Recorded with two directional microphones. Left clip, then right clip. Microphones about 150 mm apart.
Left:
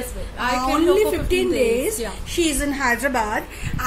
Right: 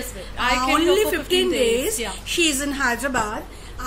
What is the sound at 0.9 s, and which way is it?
A woman's voice, 10° left (ahead or behind).